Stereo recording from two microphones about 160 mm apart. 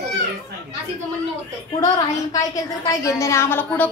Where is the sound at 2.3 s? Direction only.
20° left (ahead or behind).